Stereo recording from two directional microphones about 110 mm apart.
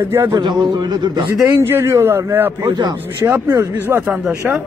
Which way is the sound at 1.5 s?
20° right (ahead or behind).